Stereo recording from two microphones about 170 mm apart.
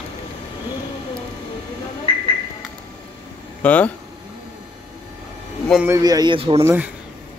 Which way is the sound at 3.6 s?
10° left (ahead or behind).